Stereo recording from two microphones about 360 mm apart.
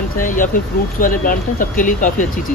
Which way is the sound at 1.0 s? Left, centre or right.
Left.